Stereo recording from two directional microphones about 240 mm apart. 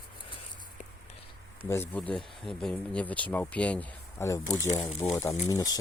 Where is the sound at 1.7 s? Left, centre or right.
Centre.